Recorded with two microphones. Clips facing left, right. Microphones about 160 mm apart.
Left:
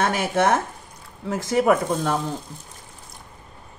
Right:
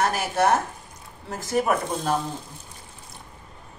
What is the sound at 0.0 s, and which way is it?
Speech, 80° left.